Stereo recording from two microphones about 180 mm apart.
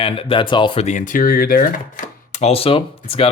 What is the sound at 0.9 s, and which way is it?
Speech, 45° left (ahead or behind).